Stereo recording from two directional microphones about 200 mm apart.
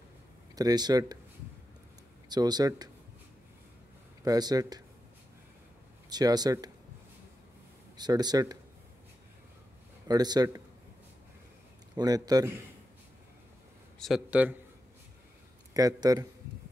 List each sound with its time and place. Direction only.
0.6 s a man's voice: 20° right (ahead or behind)
2.2 s a man's voice: 20° right (ahead or behind)
4.2 s a man's voice: 20° right (ahead or behind)
6.0 s a man's voice: 20° right (ahead or behind)
8.0 s a man's voice: 20° right (ahead or behind)
10.0 s a man's voice: 20° right (ahead or behind)
11.9 s a man's voice: 20° right (ahead or behind)
13.9 s a man's voice: centre (ahead or behind)
15.7 s a man's voice: 20° right (ahead or behind)